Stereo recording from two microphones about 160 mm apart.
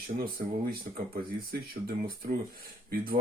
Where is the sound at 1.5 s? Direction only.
65° right (ahead or behind).